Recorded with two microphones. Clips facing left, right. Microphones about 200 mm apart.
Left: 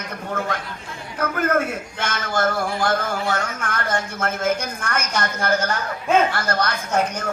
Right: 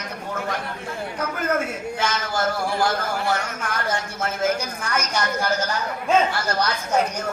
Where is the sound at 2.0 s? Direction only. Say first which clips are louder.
Left 2 dB; 55° left (ahead or behind).